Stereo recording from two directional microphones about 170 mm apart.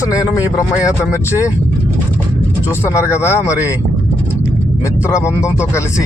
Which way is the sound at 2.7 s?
15° left (ahead or behind).